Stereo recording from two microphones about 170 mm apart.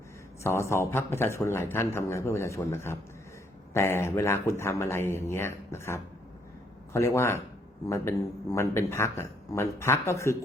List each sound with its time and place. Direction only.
0.4 s a man's voice: 15° left (ahead or behind)